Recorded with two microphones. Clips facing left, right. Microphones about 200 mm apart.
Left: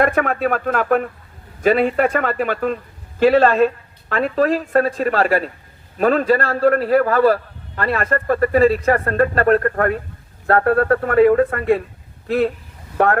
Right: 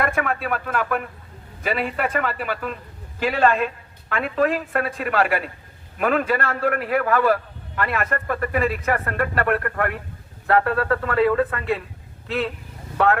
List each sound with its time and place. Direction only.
0.0 s speech: 45° left (ahead or behind)
10.6 s speech: 50° left (ahead or behind)